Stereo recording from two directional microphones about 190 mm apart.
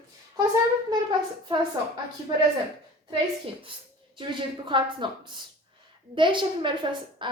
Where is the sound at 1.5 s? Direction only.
25° right (ahead or behind).